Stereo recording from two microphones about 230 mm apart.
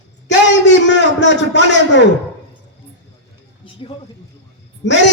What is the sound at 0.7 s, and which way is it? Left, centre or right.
A man's voice, left.